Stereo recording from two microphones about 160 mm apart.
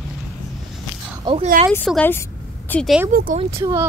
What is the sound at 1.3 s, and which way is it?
Speech, 30° right (ahead or behind).